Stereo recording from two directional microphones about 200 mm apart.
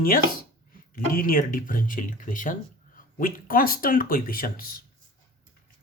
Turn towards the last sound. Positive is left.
turn(degrees=45)  # may be behind; listen again after turning